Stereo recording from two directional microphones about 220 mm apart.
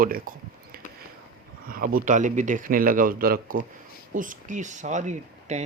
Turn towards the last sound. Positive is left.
turn(degrees=-30)  # may be behind; listen again after turning